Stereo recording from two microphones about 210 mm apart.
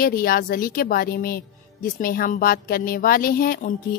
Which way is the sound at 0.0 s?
45° left (ahead or behind).